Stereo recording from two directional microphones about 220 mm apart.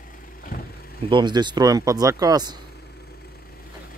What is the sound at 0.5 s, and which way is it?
Vehicle, 40° left (ahead or behind).